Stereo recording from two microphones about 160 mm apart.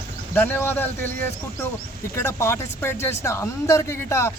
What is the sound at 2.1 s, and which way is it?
Speech, 15° left (ahead or behind).